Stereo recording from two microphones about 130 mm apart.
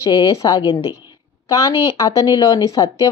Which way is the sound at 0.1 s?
30° left (ahead or behind).